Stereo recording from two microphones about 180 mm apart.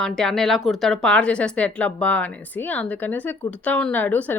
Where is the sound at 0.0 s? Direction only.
5° left (ahead or behind).